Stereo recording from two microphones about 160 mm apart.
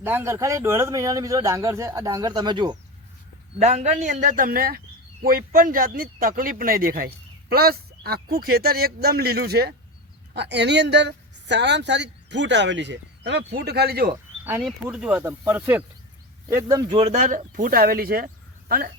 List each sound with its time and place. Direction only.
0.0 s speech: 15° right (ahead or behind)
3.6 s a man's voice: 45° right (ahead or behind); by 14.1 s 75° right (ahead or behind)
14.6 s speech: 5° right (ahead or behind)
16.9 s speech: 40° right (ahead or behind); by 18.3 s 70° right (ahead or behind)